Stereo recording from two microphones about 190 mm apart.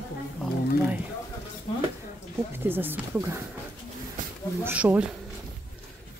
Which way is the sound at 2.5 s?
10° right (ahead or behind).